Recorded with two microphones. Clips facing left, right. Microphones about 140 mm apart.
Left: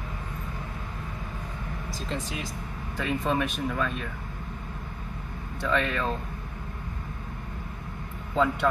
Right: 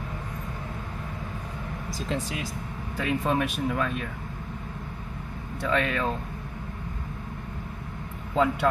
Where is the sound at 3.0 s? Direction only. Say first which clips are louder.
Right 1 dB; 5° right (ahead or behind).